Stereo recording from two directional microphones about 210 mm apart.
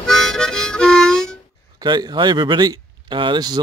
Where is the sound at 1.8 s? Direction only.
20° right (ahead or behind).